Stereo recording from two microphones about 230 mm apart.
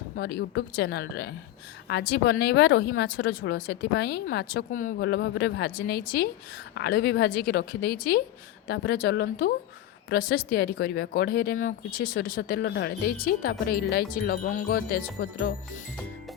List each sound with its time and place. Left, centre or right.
0.2 s a woman's voice: left
5.0 s a woman's voice: left